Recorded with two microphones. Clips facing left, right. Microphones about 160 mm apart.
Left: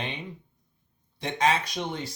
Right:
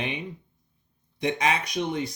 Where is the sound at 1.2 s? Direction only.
15° right (ahead or behind).